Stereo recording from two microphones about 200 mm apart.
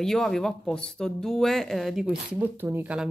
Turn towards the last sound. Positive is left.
turn(degrees=-5)  # may be behind; listen again after turning